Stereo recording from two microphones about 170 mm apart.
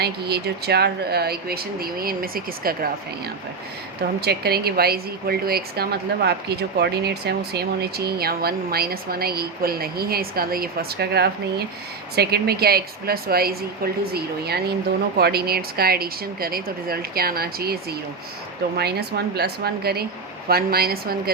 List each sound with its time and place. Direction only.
0.0 s speech: 70° right (ahead or behind)
4.2 s speech: 70° right (ahead or behind)
18.8 s speech: 70° right (ahead or behind)